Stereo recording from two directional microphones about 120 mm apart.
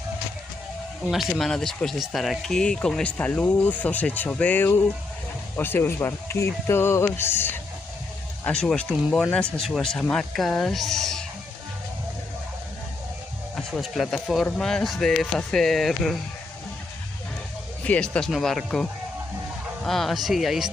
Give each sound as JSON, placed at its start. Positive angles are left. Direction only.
{"t": 1.1, "sound": "speech", "side_deg": 0}
{"t": 13.6, "sound": "speech", "side_deg": 5}
{"t": 17.8, "sound": "speech", "side_deg": 10}